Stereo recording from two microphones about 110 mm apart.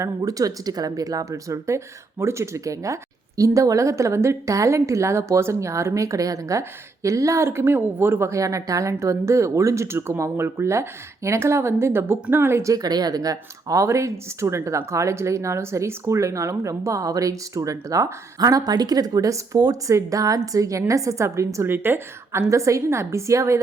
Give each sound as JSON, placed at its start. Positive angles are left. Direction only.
{"t": 0.0, "sound": "speech", "side_deg": -30}